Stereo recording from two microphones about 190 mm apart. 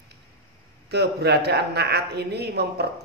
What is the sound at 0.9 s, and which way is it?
A man's voice, 60° right (ahead or behind).